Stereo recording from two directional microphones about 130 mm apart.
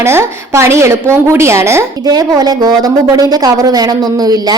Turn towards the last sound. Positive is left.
turn(degrees=-30)  # may be behind; listen again after turning